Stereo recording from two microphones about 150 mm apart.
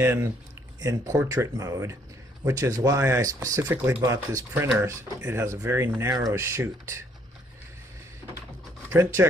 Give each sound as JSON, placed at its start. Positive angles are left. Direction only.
{"t": 0.0, "sound": "speech", "side_deg": -15}
{"t": 8.9, "sound": "speech", "side_deg": -15}